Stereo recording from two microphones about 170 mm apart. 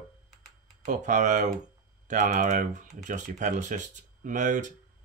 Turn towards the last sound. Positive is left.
turn(degrees=-50)  # may be behind; listen again after turning